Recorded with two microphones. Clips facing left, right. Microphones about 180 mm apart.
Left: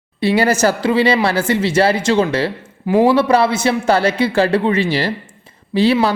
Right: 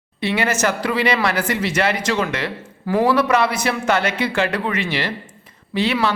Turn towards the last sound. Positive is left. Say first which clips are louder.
# left 6 dB
turn(degrees=35)  # may be behind; listen again after turning